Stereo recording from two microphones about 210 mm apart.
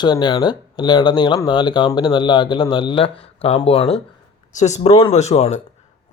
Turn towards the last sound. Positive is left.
turn(degrees=30)  # may be behind; listen again after turning